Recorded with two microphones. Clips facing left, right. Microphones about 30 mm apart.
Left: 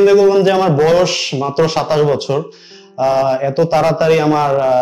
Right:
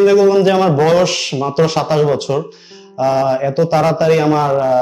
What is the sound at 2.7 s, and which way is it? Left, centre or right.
Mantra, centre.